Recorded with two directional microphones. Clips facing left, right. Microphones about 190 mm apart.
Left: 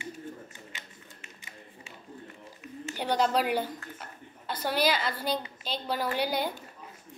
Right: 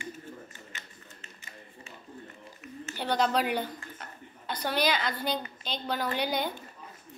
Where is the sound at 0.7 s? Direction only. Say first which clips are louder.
Even; 10° left (ahead or behind).